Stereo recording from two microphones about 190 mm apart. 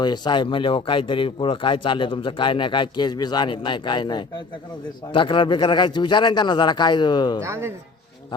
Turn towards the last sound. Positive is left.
turn(degrees=-15)  # may be behind; listen again after turning